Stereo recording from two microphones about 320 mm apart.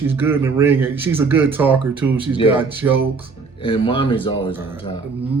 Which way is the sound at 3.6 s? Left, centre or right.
Centre.